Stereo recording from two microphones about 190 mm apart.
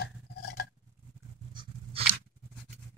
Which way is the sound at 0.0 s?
55° left (ahead or behind).